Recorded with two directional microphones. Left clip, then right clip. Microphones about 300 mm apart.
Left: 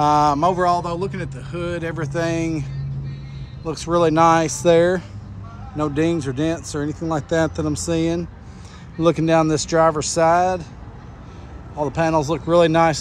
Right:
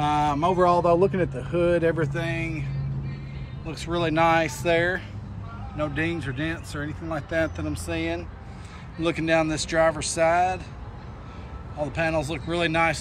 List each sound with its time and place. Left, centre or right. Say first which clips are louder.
0.0 s speech: left 7 dB; centre
3.6 s speech: left 9 dB; centre
11.8 s speech: left 6 dB; centre